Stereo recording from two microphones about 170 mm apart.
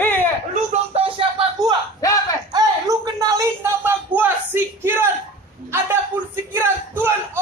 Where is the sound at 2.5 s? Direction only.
20° right (ahead or behind).